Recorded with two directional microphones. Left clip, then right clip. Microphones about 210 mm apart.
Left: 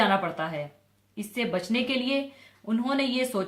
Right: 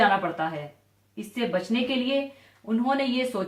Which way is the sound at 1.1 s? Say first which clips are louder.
Right 2 dB; 40° left (ahead or behind).